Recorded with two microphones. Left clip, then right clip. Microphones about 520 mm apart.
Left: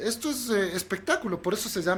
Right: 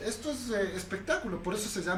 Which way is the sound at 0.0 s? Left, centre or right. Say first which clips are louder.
Left 5 dB; left.